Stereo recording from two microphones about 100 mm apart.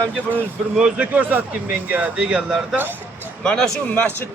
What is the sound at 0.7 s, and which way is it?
Speech, 10° right (ahead or behind).